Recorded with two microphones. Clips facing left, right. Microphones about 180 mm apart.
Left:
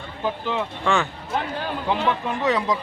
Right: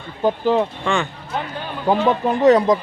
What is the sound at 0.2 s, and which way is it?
Speech, 40° right (ahead or behind).